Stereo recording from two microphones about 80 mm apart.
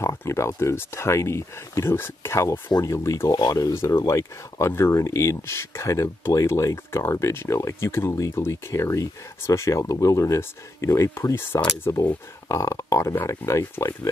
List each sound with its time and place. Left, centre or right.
0.0 s speech: left
3.3 s speech: left
3.7 s speech: left
4.0 s speech: left
12.0 s speech: left